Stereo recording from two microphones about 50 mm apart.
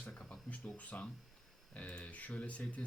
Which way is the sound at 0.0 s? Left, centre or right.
Left.